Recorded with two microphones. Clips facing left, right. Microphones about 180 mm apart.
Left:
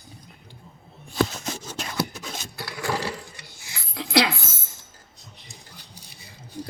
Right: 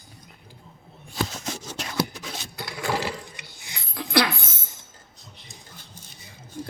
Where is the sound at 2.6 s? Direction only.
20° right (ahead or behind).